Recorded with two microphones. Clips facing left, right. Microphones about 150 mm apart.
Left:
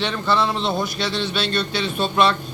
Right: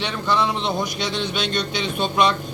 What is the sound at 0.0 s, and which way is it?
Speech, 15° right (ahead or behind).